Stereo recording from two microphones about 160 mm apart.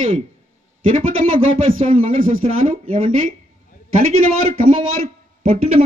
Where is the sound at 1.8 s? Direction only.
40° right (ahead or behind).